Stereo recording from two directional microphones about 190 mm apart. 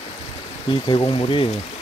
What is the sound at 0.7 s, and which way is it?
Speech, 25° left (ahead or behind).